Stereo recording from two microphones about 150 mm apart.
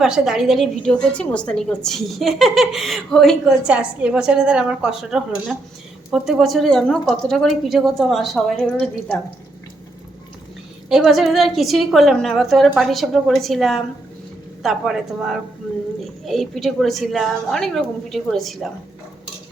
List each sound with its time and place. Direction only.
0.0 s a woman's voice: 5° right (ahead or behind)
10.8 s a woman's voice: 5° right (ahead or behind)